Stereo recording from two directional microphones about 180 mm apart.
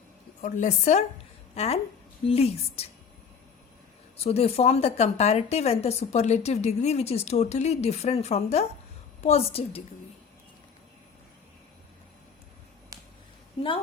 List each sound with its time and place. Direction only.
0.4 s a woman's voice: 45° left (ahead or behind)
4.2 s a woman's voice: 35° left (ahead or behind)
12.9 s a sound: 20° right (ahead or behind)